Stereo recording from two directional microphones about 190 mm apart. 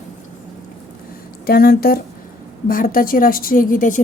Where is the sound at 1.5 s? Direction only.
50° left (ahead or behind).